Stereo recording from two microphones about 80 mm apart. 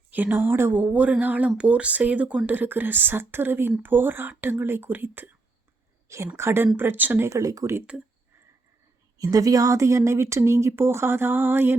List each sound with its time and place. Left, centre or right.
0.1 s speech: right
6.3 s speech: right
7.3 s speech: right
9.1 s speech: right